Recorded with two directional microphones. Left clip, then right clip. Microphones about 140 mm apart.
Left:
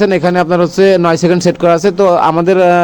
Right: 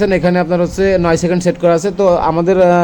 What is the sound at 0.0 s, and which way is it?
A man's voice, 15° left (ahead or behind).